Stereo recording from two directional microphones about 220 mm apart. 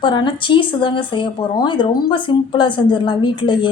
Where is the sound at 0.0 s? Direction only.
20° left (ahead or behind).